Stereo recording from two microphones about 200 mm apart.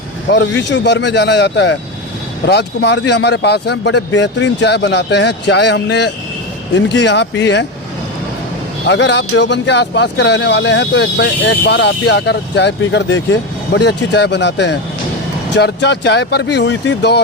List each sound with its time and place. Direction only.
0.3 s speech: 60° left (ahead or behind)
8.9 s speech: 60° left (ahead or behind)